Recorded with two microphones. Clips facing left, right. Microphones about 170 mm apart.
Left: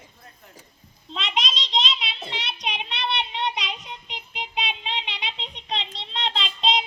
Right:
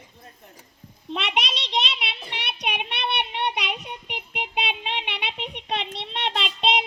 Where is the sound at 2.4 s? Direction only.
65° right (ahead or behind).